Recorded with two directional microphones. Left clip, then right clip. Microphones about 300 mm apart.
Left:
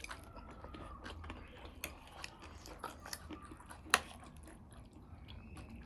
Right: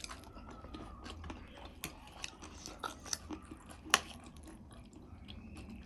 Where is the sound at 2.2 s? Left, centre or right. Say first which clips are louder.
Right 4 dB; centre.